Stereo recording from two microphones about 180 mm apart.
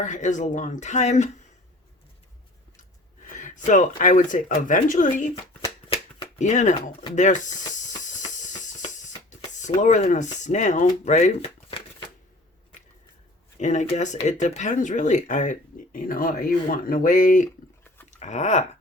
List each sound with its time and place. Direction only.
0.0 s speech: 40° left (ahead or behind)
3.3 s speech: 45° left (ahead or behind)
5.9 s shuffling cards: 35° left (ahead or behind)
7.2 s hiss: 40° left (ahead or behind)
9.6 s speech: 45° left (ahead or behind)
13.6 s speech: 40° left (ahead or behind)